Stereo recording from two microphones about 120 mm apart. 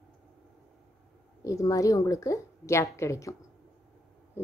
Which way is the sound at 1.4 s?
25° left (ahead or behind).